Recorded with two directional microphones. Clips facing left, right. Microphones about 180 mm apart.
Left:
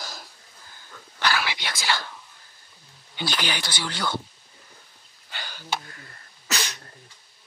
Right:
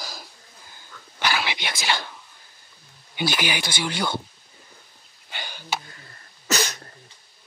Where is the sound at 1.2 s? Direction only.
20° right (ahead or behind).